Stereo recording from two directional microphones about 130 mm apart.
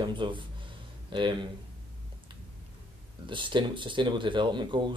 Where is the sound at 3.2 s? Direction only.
40° right (ahead or behind).